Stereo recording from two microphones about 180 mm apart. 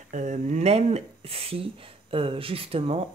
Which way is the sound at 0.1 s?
45° right (ahead or behind).